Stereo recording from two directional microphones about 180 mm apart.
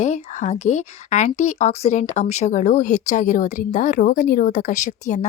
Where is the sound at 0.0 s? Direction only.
40° left (ahead or behind).